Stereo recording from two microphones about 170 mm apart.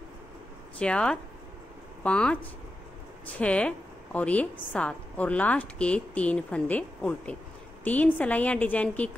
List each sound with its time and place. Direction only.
0.7 s speech: 5° left (ahead or behind)
3.3 s a woman's voice: 5° left (ahead or behind)